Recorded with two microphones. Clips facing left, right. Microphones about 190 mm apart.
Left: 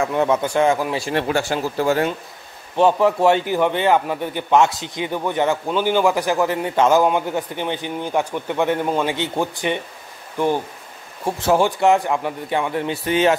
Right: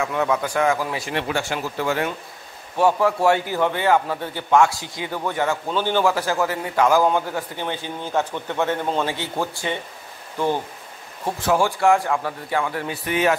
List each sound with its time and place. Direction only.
0.0 s a man's voice: 30° left (ahead or behind)
1.1 s speech: 40° left (ahead or behind)
2.8 s a man's voice: 20° left (ahead or behind)